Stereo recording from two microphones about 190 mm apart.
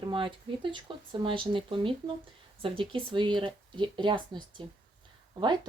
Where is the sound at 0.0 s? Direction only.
25° right (ahead or behind).